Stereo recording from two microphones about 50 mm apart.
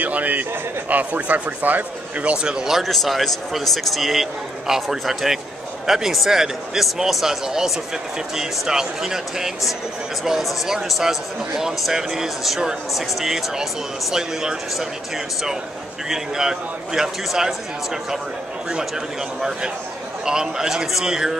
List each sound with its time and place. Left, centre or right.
0.0 s a man's voice: right
2.3 s speech: centre
2.8 s a man's voice: centre
10.9 s speech: centre
16.1 s speech: centre
20.2 s speech: centre